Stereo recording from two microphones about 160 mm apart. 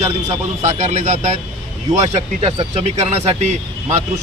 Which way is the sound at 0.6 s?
45° right (ahead or behind).